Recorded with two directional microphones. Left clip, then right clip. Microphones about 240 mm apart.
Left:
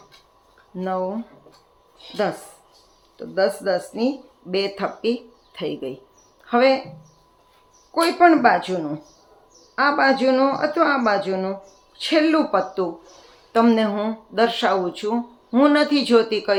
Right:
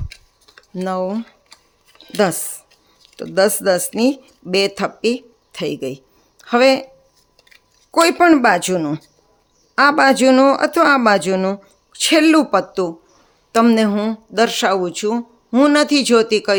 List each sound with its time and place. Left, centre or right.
0.8 s speech: right
3.2 s speech: right
7.9 s speech: right